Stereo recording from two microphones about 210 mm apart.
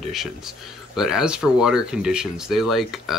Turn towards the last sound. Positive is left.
turn(degrees=0)  # may be behind; listen again after turning